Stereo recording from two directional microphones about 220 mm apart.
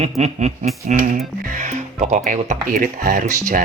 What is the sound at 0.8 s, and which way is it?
Speech, 35° right (ahead or behind).